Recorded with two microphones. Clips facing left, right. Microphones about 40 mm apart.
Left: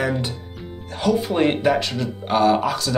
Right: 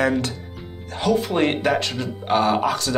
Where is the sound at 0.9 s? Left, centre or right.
Right.